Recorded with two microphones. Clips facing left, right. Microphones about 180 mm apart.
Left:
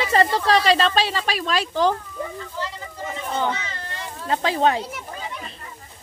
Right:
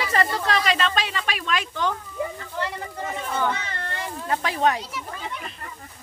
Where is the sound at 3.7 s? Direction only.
60° right (ahead or behind).